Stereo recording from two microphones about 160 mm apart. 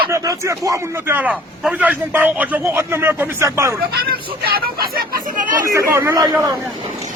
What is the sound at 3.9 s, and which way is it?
Speech, 70° right (ahead or behind).